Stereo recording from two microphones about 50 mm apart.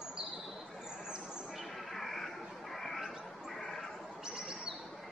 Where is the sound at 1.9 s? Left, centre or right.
Centre.